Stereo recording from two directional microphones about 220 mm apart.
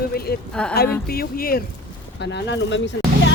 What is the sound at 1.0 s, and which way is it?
Speech, 45° left (ahead or behind).